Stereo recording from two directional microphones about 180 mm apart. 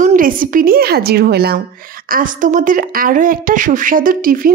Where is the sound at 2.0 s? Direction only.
50° right (ahead or behind).